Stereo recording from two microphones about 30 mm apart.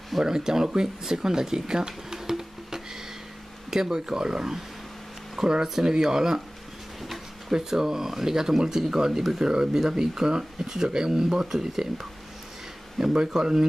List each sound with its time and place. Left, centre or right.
0.2 s speech: right
2.1 s music: centre
3.7 s speech: centre
5.4 s speech: centre
7.0 s a sound: centre
7.5 s speech: centre
13.1 s speech: right